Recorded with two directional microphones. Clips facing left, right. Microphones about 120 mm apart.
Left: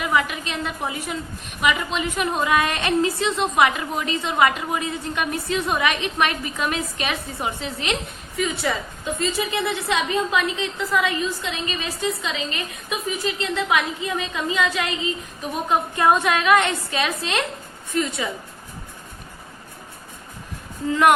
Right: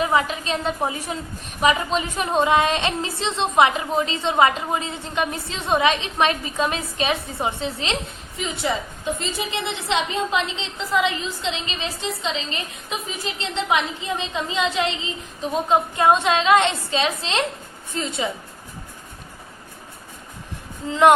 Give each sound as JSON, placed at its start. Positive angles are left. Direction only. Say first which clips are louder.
{"t": 0.0, "sound": "a woman's voice", "louder": "right 2 dB", "side_deg": -30}